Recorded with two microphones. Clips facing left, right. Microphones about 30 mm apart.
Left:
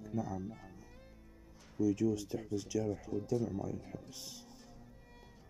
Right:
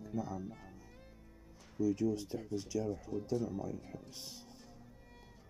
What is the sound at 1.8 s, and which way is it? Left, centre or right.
Speech, right.